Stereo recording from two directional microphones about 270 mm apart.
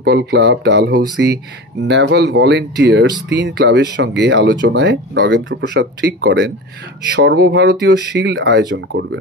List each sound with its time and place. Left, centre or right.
0.0 s speech: right